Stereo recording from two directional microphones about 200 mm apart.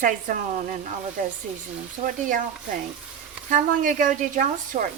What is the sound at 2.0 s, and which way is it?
Speech, 40° right (ahead or behind).